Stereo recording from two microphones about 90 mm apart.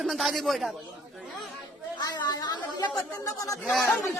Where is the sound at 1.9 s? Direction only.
50° left (ahead or behind).